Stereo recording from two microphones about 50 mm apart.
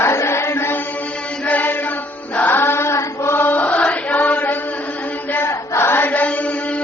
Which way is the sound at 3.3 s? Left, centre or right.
Left.